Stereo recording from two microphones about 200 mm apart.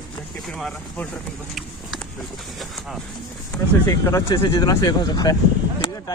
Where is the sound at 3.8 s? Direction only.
15° left (ahead or behind).